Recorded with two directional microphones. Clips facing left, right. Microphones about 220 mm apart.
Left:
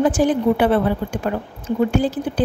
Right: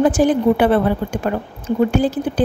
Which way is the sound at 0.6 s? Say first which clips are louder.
Right 2 dB; 55° right (ahead or behind).